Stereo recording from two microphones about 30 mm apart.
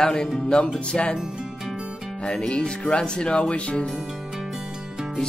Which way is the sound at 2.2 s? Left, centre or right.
Left.